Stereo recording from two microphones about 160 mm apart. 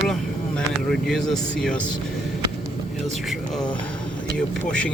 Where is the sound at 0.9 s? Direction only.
Centre (ahead or behind).